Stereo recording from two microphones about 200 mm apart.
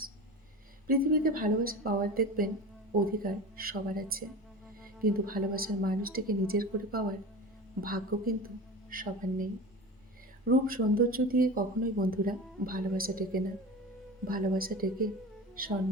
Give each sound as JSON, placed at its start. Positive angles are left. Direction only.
{"t": 0.9, "sound": "speech", "side_deg": -45}
{"t": 10.7, "sound": "speech", "side_deg": -45}